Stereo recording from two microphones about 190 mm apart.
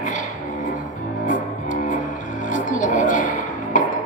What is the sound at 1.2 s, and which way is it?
Music, 40° left (ahead or behind).